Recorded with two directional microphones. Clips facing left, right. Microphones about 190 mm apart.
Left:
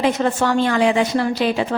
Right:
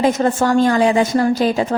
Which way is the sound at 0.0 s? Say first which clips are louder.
Right 3 dB; 45° right (ahead or behind).